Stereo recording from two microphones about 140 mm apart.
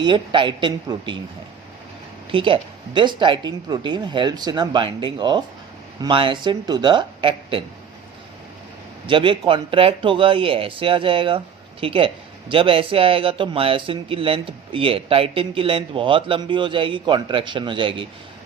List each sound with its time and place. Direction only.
0.0 s speech: 35° right (ahead or behind)
2.3 s speech: 40° right (ahead or behind)
9.0 s speech: 35° right (ahead or behind)